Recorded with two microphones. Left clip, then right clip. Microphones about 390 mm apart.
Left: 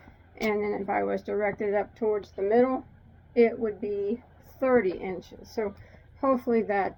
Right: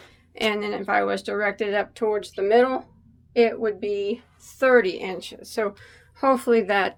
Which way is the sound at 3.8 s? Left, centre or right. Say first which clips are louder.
Right 4 dB; right.